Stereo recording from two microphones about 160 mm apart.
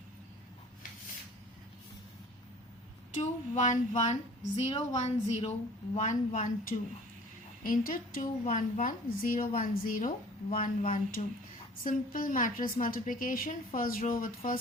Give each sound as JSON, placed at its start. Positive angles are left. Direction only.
{"t": 3.2, "sound": "a woman's voice", "side_deg": 50}